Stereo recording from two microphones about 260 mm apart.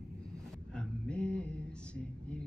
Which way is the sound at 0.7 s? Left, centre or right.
Centre.